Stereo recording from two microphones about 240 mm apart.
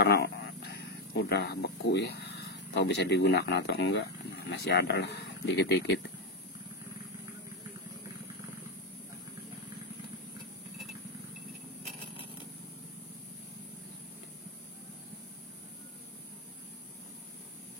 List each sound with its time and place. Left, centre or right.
0.0 s speech: left